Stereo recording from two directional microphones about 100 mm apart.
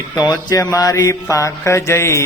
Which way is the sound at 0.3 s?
35° left (ahead or behind).